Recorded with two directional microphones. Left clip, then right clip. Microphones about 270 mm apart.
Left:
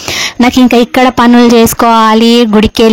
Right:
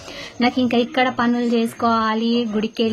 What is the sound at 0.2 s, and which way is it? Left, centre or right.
A woman's voice, left.